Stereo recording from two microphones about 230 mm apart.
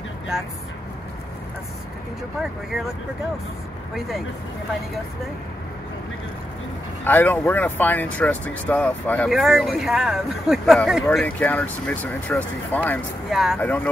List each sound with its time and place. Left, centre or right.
7.1 s speech: centre